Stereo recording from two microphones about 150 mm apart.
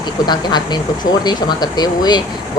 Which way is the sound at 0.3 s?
30° left (ahead or behind).